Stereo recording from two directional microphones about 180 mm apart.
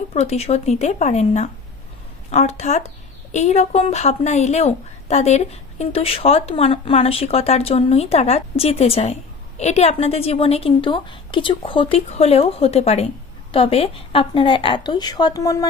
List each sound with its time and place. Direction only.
0.1 s a woman's voice: 35° left (ahead or behind); by 15.6 s 20° left (ahead or behind)